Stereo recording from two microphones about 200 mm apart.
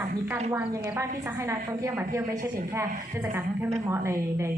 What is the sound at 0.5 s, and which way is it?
A woman's voice, 15° right (ahead or behind).